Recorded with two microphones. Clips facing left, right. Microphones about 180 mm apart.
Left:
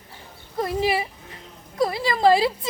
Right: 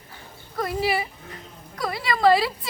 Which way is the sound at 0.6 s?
25° left (ahead or behind).